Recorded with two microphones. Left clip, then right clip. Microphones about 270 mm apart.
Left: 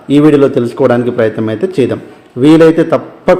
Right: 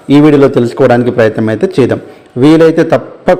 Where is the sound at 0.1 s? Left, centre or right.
Centre.